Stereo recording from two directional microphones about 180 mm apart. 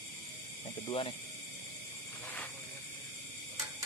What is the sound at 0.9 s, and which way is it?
Speech, 30° left (ahead or behind).